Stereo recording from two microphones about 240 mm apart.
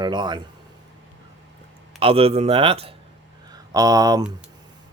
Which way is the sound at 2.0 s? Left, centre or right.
Right.